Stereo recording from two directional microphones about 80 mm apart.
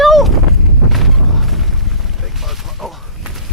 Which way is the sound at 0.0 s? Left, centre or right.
Centre.